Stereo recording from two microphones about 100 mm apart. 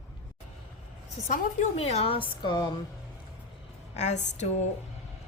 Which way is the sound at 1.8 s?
90° left.